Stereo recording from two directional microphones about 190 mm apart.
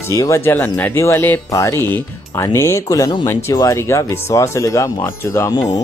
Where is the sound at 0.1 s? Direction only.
15° left (ahead or behind).